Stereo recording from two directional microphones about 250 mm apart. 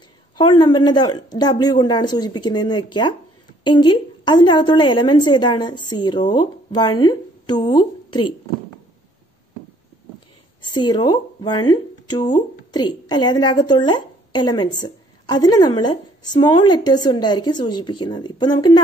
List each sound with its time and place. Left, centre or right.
0.4 s a woman's voice: centre
10.8 s speech: centre